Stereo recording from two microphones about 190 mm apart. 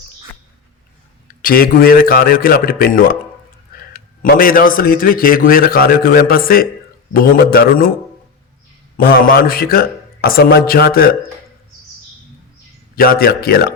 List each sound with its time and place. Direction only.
1.4 s a man's voice: 50° left (ahead or behind)
9.0 s a man's voice: 50° left (ahead or behind)
13.0 s a man's voice: 50° left (ahead or behind)